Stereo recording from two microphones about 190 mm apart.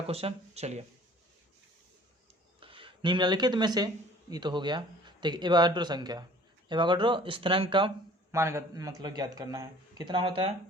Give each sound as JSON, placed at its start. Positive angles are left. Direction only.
{"t": 0.1, "sound": "speech", "side_deg": -30}
{"t": 2.6, "sound": "a man's voice", "side_deg": -30}
{"t": 8.4, "sound": "a man's voice", "side_deg": -15}